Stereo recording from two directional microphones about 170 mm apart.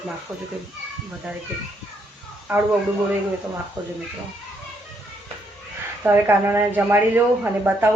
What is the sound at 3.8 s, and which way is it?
Speech, 20° right (ahead or behind).